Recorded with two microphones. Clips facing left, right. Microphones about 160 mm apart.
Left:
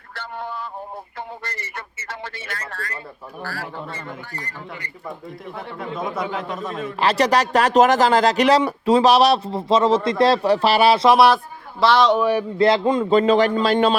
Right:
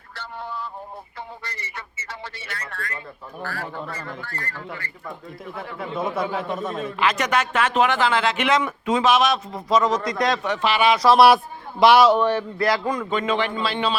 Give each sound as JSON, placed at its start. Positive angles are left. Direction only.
{"t": 0.1, "sound": "a sound", "side_deg": 55}
{"t": 1.5, "sound": "speech", "side_deg": 50}
{"t": 2.6, "sound": "speech", "side_deg": 40}
{"t": 3.8, "sound": "speech", "side_deg": 25}
{"t": 5.5, "sound": "a man's voice", "side_deg": 0}
{"t": 7.0, "sound": "speech", "side_deg": 35}
{"t": 11.8, "sound": "a man's voice", "side_deg": -10}
{"t": 12.2, "sound": "speech", "side_deg": 10}
{"t": 12.5, "sound": "a man's voice", "side_deg": 25}
{"t": 13.1, "sound": "speech", "side_deg": 35}